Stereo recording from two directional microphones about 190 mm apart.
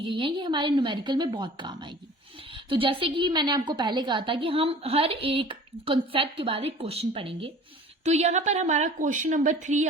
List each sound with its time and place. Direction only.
0.0 s a woman's voice: 25° right (ahead or behind)